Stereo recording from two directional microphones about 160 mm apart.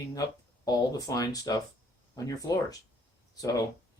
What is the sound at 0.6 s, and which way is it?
Speech, 25° left (ahead or behind).